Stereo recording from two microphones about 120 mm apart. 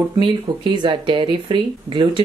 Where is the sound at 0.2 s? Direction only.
45° right (ahead or behind).